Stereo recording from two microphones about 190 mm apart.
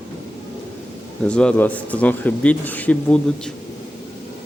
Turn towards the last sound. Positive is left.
turn(degrees=5)  # may be behind; listen again after turning